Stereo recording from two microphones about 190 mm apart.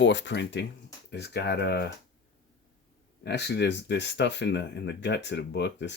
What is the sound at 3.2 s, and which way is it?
Speech, 60° left (ahead or behind).